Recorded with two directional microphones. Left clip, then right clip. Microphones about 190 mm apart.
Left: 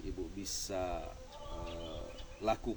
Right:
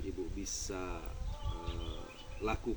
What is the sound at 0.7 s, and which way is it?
Speech, 35° left (ahead or behind).